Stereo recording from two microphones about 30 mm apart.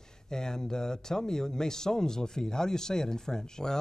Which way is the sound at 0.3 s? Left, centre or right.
Left.